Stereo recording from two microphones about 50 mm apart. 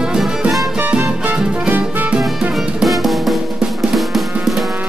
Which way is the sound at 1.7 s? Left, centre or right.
Right.